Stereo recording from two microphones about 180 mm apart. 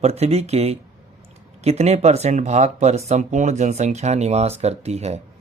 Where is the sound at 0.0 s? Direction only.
35° right (ahead or behind).